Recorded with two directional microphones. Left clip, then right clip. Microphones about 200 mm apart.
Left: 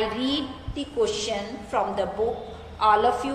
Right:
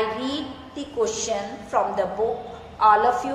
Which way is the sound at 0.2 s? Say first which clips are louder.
Left 1 dB; 30° left (ahead or behind).